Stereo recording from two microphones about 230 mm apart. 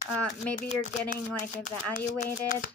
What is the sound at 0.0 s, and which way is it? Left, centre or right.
Speech, centre.